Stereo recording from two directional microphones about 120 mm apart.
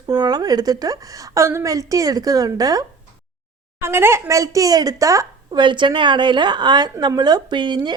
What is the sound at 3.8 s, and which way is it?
Speech, 20° right (ahead or behind).